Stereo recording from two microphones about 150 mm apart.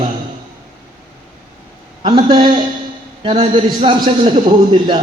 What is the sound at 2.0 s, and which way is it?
A man's voice, 30° right (ahead or behind).